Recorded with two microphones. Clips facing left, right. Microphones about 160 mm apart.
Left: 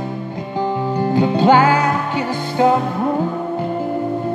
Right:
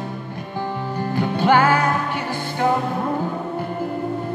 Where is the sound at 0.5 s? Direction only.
15° left (ahead or behind).